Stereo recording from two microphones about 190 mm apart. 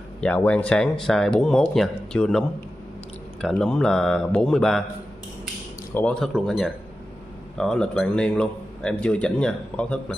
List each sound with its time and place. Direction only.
0.2 s a man's voice: 5° left (ahead or behind)
5.9 s a man's voice: 5° left (ahead or behind)